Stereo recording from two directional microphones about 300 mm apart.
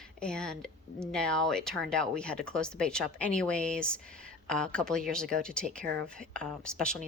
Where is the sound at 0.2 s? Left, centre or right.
Centre.